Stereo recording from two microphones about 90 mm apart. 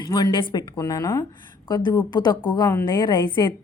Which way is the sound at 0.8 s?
40° left (ahead or behind).